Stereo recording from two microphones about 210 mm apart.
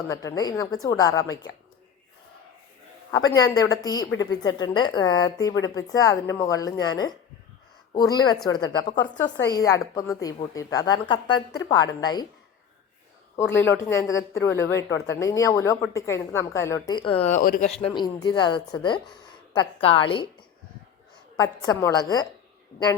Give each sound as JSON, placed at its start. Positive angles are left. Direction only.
{"t": 0.1, "sound": "speech", "side_deg": 15}
{"t": 3.1, "sound": "speech", "side_deg": 15}
{"t": 13.6, "sound": "speech", "side_deg": 10}
{"t": 17.7, "sound": "speech", "side_deg": 25}
{"t": 21.3, "sound": "speech", "side_deg": 15}